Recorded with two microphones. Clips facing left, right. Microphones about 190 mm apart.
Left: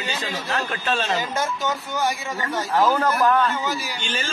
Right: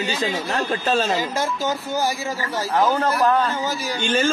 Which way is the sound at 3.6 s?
45° right (ahead or behind).